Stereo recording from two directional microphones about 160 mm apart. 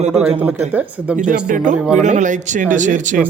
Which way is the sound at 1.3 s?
55° right (ahead or behind).